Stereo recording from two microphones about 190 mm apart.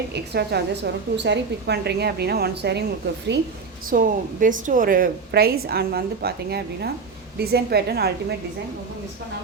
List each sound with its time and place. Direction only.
0.1 s a woman's voice: 60° right (ahead or behind)
3.8 s a woman's voice: 45° right (ahead or behind)